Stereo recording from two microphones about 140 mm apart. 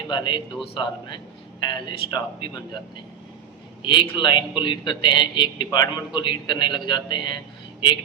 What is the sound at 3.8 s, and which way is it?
A man's voice, 35° left (ahead or behind).